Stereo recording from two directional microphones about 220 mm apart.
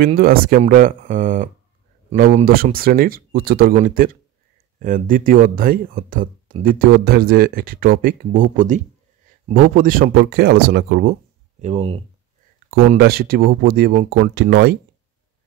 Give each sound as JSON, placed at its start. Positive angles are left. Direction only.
{"t": 0.2, "sound": "speech", "side_deg": -40}
{"t": 11.6, "sound": "speech", "side_deg": -30}
{"t": 12.9, "sound": "speech", "side_deg": -45}